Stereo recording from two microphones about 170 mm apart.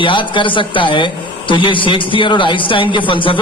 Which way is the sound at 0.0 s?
30° left (ahead or behind).